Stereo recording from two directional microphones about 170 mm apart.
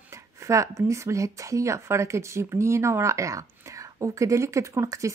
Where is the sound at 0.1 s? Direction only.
15° right (ahead or behind).